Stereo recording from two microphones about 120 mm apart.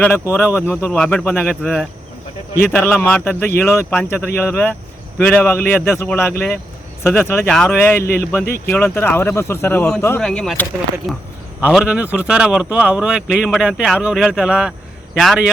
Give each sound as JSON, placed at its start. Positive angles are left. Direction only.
{"t": 0.0, "sound": "speech", "side_deg": 15}
{"t": 0.9, "sound": "speech", "side_deg": 5}
{"t": 11.6, "sound": "speech", "side_deg": -10}